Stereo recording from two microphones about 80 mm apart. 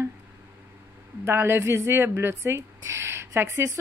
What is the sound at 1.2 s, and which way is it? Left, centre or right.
A woman's voice, right.